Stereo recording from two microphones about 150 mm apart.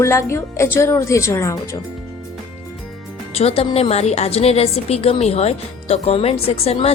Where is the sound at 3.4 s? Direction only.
40° left (ahead or behind).